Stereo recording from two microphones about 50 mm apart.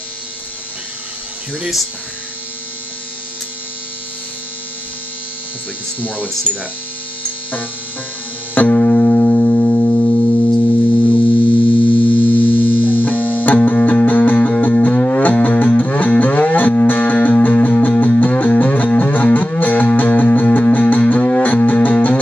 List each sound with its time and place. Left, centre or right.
5.9 s speech: left
8.5 s music: left
9.9 s music: left
10.6 s hum: left
12.3 s music: left